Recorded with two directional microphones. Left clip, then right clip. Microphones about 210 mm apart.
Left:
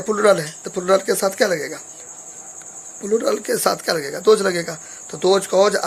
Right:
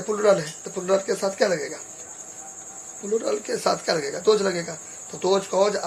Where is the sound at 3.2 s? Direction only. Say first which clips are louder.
Left 3 dB; 35° left (ahead or behind).